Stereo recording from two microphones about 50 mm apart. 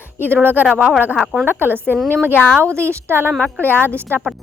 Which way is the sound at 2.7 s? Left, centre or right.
Right.